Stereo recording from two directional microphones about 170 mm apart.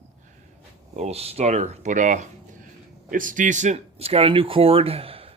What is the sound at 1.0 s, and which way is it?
Speech, 40° right (ahead or behind).